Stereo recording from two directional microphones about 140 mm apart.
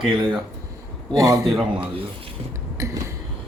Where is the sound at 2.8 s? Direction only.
25° right (ahead or behind).